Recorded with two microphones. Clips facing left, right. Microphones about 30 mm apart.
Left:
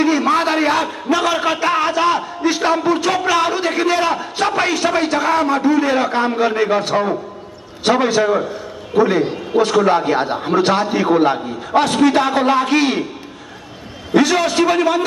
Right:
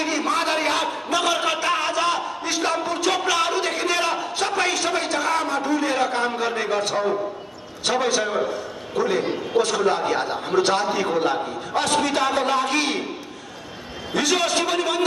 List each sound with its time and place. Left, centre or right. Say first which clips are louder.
0.0 s a sound: left 7 dB; left
1.1 s speech: left 5 dB; centre
9.2 s a man's voice: left 5 dB; centre
9.6 s speech: left 7 dB; left
14.3 s a man's voice: left 6 dB; centre